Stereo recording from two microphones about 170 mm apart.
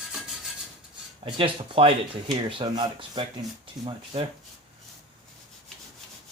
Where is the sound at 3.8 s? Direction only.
30° right (ahead or behind).